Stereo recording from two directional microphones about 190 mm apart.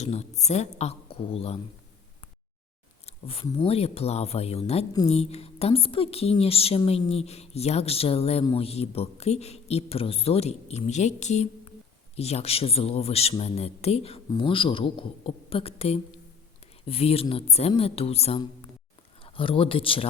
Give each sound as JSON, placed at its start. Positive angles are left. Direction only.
{"t": 0.0, "sound": "a man's voice", "side_deg": 35}
{"t": 3.1, "sound": "a sound", "side_deg": 30}
{"t": 3.4, "sound": "a man's voice", "side_deg": 30}